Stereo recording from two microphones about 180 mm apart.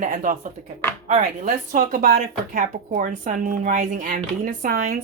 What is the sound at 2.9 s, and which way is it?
Speech, 45° right (ahead or behind).